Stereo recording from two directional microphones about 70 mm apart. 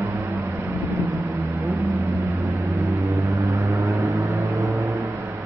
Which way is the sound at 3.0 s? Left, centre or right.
Right.